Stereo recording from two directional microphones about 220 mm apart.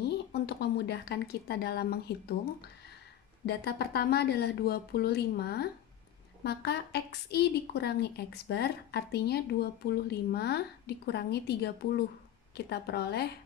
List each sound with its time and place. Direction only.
0.0 s speech: 50° left (ahead or behind)
3.4 s a woman's voice: 45° left (ahead or behind)